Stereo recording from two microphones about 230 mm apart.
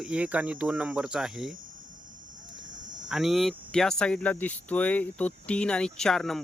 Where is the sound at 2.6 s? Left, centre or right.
Right.